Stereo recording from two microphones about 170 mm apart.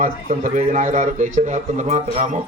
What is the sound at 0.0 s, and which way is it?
A man's voice, 50° right (ahead or behind).